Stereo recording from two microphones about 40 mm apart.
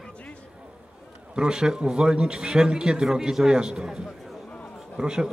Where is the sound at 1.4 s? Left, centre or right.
Right.